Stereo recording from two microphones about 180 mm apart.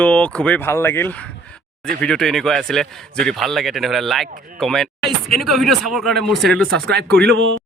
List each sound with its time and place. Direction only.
0.0 s speech: 10° left (ahead or behind)
6.9 s speech: 65° right (ahead or behind)